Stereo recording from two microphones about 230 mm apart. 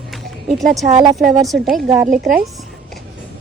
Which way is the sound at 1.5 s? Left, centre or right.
Centre.